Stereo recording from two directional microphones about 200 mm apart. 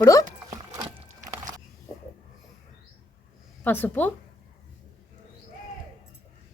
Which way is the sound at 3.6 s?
10° left (ahead or behind).